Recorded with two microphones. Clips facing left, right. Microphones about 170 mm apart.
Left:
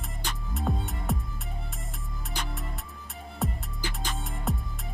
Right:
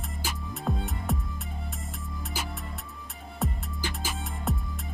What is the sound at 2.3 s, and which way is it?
Music, 5° right (ahead or behind).